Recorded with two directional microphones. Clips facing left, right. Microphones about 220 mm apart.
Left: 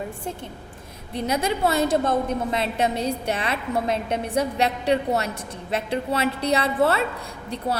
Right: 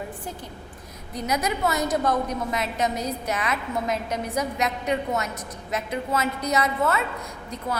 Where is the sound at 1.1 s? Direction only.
30° left (ahead or behind).